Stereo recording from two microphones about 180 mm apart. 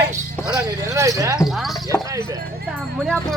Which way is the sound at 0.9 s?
15° right (ahead or behind).